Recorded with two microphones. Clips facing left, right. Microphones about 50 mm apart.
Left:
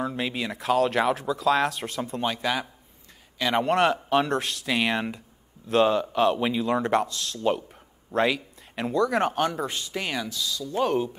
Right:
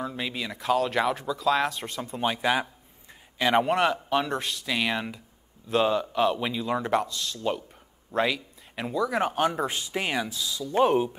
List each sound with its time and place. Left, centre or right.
0.0 s speech: centre
2.2 s a man's voice: centre
3.6 s a man's voice: centre
9.5 s speech: right